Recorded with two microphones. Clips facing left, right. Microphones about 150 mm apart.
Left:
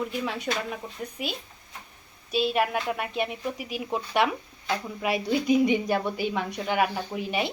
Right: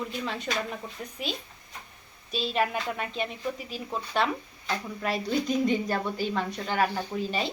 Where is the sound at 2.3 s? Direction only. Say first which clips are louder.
Left 3 dB; 10° left (ahead or behind).